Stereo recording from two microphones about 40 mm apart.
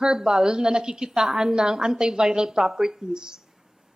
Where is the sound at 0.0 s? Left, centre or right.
Centre.